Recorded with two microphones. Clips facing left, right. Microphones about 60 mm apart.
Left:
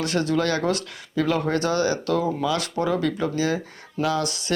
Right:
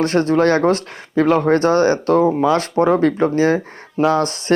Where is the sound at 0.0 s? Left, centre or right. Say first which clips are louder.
Right 8 dB; right.